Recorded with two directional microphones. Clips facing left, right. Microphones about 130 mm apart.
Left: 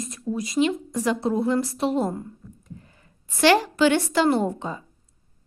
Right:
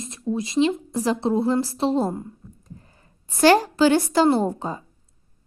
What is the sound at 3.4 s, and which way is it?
A woman's voice, 40° right (ahead or behind).